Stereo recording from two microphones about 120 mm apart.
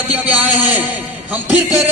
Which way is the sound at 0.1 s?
15° right (ahead or behind).